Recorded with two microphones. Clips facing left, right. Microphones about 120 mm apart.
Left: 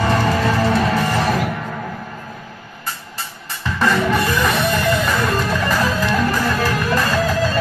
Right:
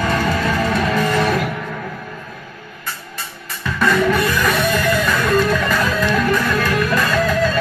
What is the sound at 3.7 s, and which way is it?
Music, 25° left (ahead or behind).